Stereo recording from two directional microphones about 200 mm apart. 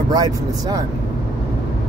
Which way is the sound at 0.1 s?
20° right (ahead or behind).